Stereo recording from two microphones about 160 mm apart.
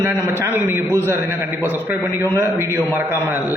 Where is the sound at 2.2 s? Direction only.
15° right (ahead or behind).